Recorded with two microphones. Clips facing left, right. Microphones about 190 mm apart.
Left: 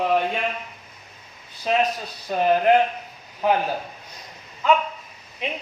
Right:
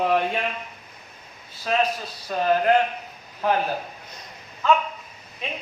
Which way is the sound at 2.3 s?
20° left (ahead or behind).